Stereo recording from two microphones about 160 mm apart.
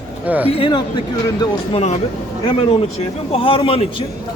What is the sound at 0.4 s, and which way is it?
Speech, 35° left (ahead or behind).